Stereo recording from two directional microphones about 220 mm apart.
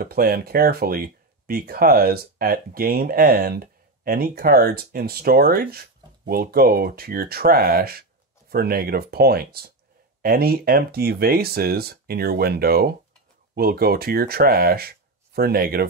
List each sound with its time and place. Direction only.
0.0 s speech: 40° right (ahead or behind)